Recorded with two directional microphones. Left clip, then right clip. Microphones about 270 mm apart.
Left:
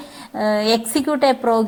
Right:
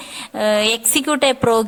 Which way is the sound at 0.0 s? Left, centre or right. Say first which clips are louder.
Right 6 dB; right.